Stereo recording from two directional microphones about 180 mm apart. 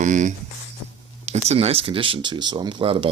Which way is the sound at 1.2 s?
35° right (ahead or behind).